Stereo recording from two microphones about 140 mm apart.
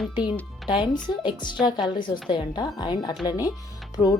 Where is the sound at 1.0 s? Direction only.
35° left (ahead or behind).